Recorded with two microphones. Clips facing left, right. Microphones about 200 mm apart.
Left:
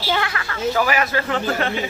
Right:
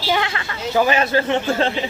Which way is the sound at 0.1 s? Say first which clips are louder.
Right 2 dB; 25° right (ahead or behind).